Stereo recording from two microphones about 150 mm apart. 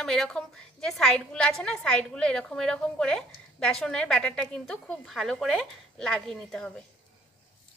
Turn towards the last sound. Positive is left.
turn(degrees=5)  # may be behind; listen again after turning